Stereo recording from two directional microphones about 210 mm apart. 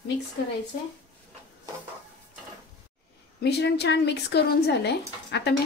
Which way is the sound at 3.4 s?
55° left (ahead or behind).